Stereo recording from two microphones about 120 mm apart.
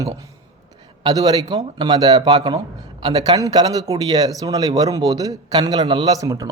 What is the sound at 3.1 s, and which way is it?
Speech, 30° right (ahead or behind).